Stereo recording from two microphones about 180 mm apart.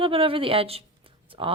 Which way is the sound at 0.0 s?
30° right (ahead or behind).